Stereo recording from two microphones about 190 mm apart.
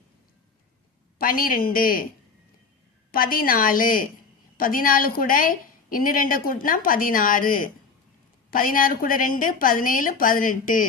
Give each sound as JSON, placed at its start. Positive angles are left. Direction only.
{"t": 1.2, "sound": "a woman's voice", "side_deg": 50}
{"t": 3.1, "sound": "a woman's voice", "side_deg": 50}